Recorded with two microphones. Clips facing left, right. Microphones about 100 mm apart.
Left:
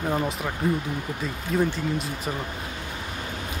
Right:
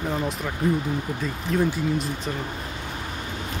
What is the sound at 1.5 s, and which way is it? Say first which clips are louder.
Speech: right 1 dB; 5° left (ahead or behind).